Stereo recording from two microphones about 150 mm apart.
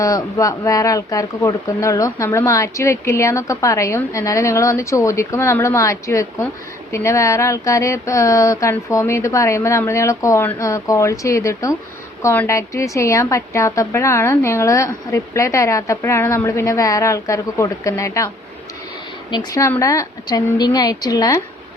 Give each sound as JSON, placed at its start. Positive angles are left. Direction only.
{"t": 0.0, "sound": "speech", "side_deg": 25}
{"t": 19.3, "sound": "speech", "side_deg": 25}